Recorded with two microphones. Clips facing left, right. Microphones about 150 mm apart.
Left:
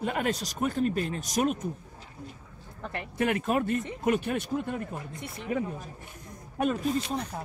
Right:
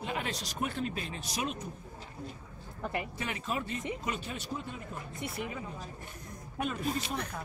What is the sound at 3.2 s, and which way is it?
Speech, 55° left (ahead or behind).